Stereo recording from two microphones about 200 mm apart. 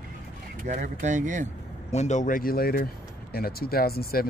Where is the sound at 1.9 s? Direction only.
35° left (ahead or behind).